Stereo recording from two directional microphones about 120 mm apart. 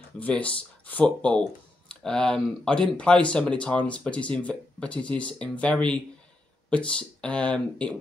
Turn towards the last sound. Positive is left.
turn(degrees=10)  # may be behind; listen again after turning